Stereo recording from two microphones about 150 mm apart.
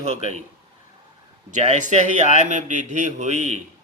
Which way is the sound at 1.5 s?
50° right (ahead or behind).